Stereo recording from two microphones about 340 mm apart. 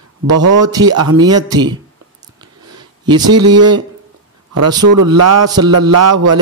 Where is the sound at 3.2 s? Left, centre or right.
Right.